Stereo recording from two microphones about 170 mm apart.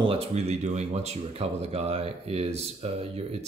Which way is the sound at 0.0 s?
35° right (ahead or behind).